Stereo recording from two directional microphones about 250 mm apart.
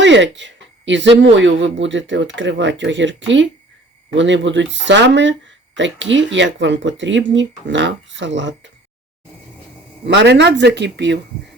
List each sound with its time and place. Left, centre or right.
0.0 s speech: right
10.1 s speech: right